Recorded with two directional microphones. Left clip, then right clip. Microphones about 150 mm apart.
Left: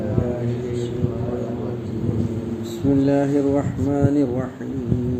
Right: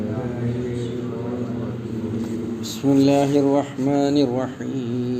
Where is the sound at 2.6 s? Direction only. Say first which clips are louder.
Right 2 dB; 50° right (ahead or behind).